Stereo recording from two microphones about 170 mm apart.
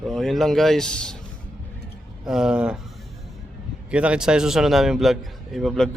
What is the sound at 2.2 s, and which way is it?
Speech, 5° right (ahead or behind).